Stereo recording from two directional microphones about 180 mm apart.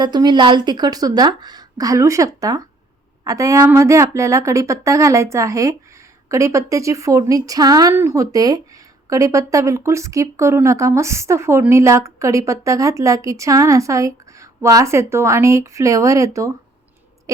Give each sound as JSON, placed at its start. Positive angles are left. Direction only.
{"t": 0.0, "sound": "a woman's voice", "side_deg": -25}
{"t": 17.3, "sound": "owl", "side_deg": -20}